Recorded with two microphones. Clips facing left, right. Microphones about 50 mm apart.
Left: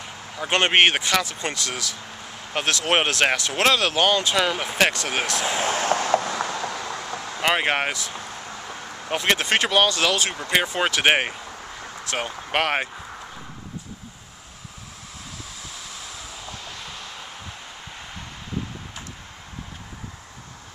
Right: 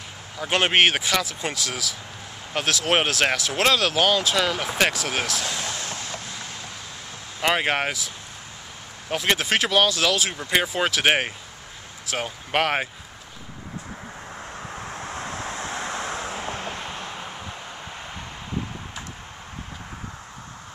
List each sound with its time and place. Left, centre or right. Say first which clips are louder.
0.4 s speech: left 1 dB; centre
5.4 s speech: left 6 dB; left
5.9 s a sound: left 11 dB; left
6.1 s a sound: left 12 dB; left
7.4 s speech: even; centre
9.1 s speech: left 1 dB; centre
15.0 s vehicle: right 8 dB; right